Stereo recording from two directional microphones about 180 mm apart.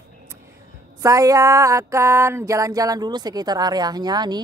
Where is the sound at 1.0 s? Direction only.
20° right (ahead or behind).